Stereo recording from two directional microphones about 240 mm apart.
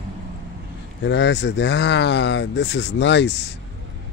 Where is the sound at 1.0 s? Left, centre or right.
Left.